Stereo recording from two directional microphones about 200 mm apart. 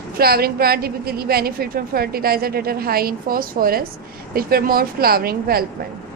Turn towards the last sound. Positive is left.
turn(degrees=-50)  # may be behind; listen again after turning